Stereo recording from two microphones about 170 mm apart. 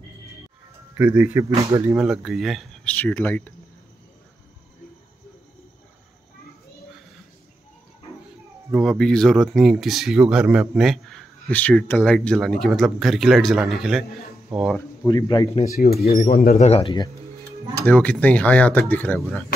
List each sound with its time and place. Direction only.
0.9 s speech: 10° right (ahead or behind)
2.0 s speech: 5° right (ahead or behind)
8.7 s speech: centre (ahead or behind)
15.0 s speech: 25° left (ahead or behind)
15.7 s speech: 60° left (ahead or behind)
16.0 s speech: 40° left (ahead or behind)
16.3 s speech: 50° left (ahead or behind); by 17.1 s 30° left (ahead or behind)
17.8 s speech: 10° left (ahead or behind)